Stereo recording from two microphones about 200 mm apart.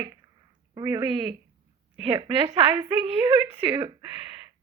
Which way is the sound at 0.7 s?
20° right (ahead or behind).